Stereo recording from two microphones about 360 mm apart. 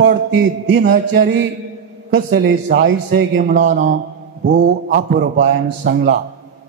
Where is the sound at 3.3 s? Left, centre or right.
Right.